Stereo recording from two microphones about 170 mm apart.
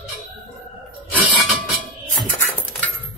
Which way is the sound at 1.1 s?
10° right (ahead or behind).